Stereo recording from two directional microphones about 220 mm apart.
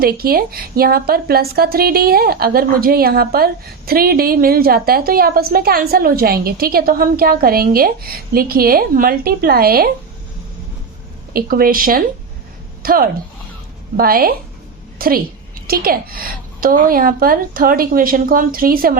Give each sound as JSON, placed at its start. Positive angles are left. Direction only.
{"t": 0.0, "sound": "a woman's voice", "side_deg": -45}
{"t": 11.3, "sound": "a woman's voice", "side_deg": -40}